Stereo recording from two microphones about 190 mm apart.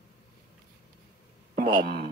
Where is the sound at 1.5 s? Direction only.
50° right (ahead or behind).